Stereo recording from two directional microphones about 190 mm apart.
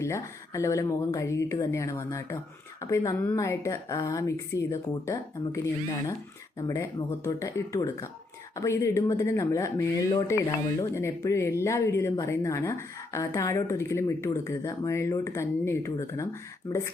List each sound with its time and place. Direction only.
0.0 s speech: 15° left (ahead or behind)